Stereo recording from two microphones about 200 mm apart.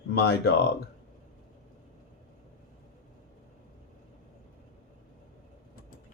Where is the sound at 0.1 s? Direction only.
55° left (ahead or behind).